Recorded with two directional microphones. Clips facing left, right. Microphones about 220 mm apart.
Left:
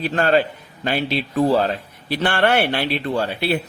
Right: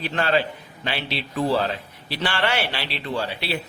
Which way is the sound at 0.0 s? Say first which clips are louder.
Left 5 dB; 45° left (ahead or behind).